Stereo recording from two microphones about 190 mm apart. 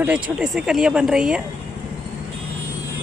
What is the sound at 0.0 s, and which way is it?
Speech, 5° right (ahead or behind).